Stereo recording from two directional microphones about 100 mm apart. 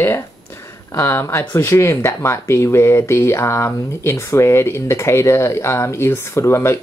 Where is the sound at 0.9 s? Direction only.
30° left (ahead or behind).